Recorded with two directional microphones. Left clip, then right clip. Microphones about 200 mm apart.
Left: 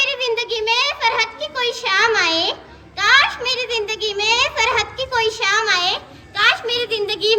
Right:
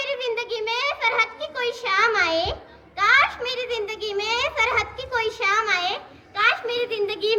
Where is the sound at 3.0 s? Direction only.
25° right (ahead or behind).